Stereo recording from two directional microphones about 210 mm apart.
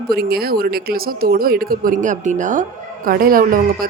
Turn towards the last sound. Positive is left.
turn(degrees=-45)  # may be behind; listen again after turning